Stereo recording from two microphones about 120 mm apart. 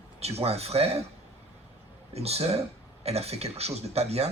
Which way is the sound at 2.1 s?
60° right (ahead or behind).